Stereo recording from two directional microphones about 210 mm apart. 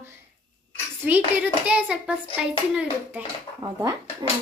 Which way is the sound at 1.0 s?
10° right (ahead or behind).